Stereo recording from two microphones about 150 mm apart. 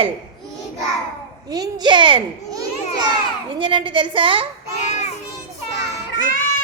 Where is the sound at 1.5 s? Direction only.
30° right (ahead or behind).